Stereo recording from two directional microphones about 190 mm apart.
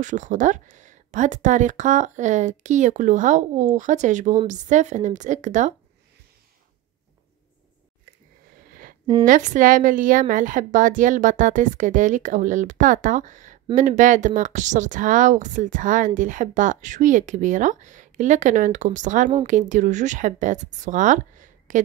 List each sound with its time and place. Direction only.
0.0 s speech: 40° right (ahead or behind)
9.2 s a woman's voice: 45° right (ahead or behind)